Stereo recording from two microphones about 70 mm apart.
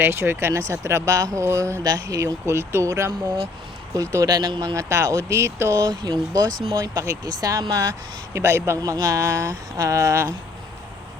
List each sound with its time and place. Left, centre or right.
0.0 s speech: right
1.8 s speech: right
2.5 s speech: right
4.3 s speech: right
4.7 s speech: right
6.0 s speech: right
6.7 s speech: right
8.3 s speech: right
8.8 s speech: right